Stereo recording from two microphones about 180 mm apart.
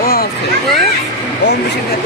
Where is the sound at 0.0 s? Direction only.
55° left (ahead or behind).